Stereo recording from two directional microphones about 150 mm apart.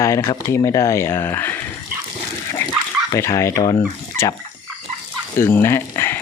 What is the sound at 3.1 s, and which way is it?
Speech, 20° left (ahead or behind).